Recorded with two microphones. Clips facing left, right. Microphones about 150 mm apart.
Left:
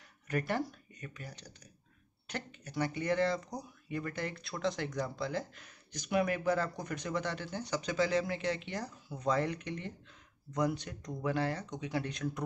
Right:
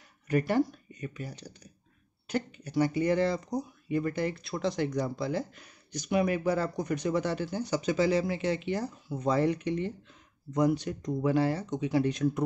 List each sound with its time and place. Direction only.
0.3 s speech: 5° right (ahead or behind)